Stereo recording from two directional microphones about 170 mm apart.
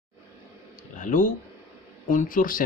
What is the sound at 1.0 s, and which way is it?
Speech, 50° left (ahead or behind).